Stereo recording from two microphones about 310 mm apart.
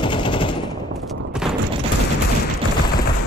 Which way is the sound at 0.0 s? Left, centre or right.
Centre.